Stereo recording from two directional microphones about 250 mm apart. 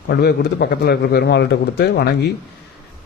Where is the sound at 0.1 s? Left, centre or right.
Left.